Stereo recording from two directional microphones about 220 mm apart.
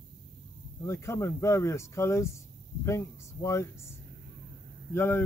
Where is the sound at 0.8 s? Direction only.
10° left (ahead or behind).